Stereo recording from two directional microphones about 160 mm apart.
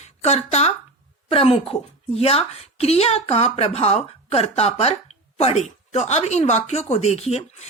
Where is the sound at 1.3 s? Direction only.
35° left (ahead or behind).